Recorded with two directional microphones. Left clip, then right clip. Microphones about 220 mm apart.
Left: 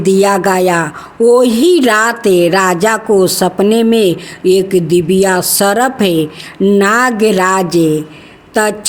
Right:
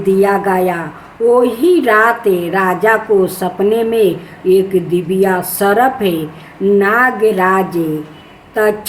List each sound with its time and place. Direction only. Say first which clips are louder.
0.0 s a woman's voice: left 2 dB; 45° left (ahead or behind)